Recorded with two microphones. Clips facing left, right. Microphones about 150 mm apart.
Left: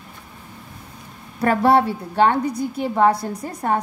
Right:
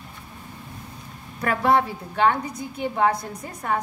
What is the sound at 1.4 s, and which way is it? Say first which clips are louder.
A woman's voice: left 4 dB; 35° left (ahead or behind).